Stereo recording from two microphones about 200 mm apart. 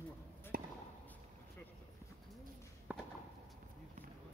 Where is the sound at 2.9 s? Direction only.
5° right (ahead or behind).